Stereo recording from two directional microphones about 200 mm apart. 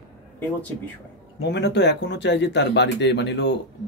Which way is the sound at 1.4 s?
60° left (ahead or behind).